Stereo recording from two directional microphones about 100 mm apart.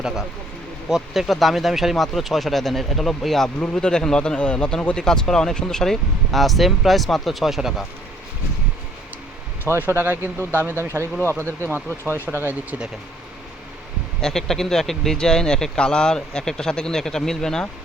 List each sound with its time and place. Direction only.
0.9 s speech: 5° right (ahead or behind)
9.6 s speech: 20° right (ahead or behind)
14.2 s speech: 5° left (ahead or behind)